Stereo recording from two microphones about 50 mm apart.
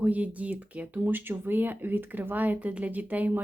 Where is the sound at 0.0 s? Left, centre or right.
Right.